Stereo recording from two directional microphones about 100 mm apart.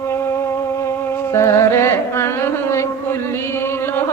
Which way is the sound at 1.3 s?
30° left (ahead or behind).